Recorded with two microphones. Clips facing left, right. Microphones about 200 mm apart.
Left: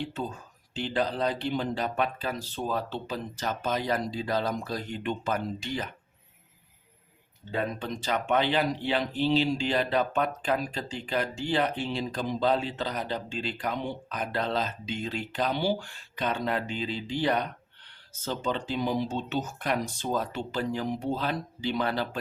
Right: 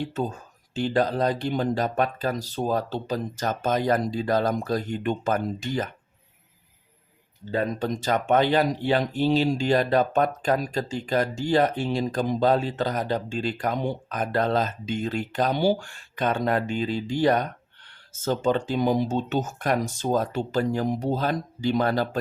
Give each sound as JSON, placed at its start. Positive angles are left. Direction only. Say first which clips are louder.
{"t": 0.0, "sound": "speech", "louder": "right 5 dB", "side_deg": -45}
{"t": 7.5, "sound": "speech", "louder": "right 5 dB", "side_deg": -40}